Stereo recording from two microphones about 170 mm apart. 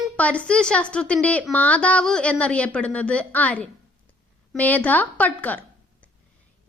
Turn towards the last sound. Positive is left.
turn(degrees=10)  # may be behind; listen again after turning